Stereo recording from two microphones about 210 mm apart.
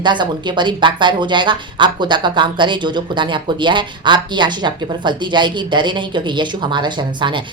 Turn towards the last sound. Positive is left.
turn(degrees=-20)  # may be behind; listen again after turning